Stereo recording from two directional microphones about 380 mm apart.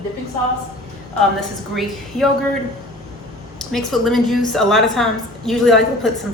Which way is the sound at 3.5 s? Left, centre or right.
Centre.